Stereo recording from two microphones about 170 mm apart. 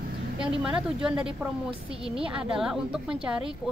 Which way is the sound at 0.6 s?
5° right (ahead or behind).